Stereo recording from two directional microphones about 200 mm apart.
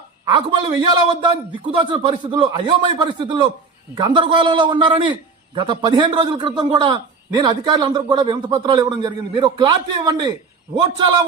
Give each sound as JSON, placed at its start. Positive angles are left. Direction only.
{"t": 0.3, "sound": "a man's voice", "side_deg": -25}